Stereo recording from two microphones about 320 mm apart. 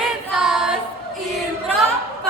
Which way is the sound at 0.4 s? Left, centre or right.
Centre.